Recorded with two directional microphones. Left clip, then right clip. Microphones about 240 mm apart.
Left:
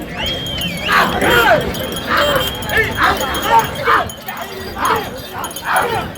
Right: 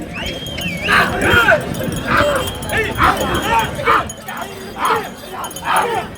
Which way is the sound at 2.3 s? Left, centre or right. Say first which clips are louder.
Left 3 dB; centre.